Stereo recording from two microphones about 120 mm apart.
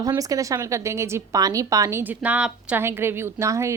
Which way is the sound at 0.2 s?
30° right (ahead or behind).